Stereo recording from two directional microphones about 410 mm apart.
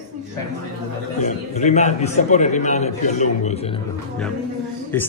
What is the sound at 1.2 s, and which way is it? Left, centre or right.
A man's voice, centre.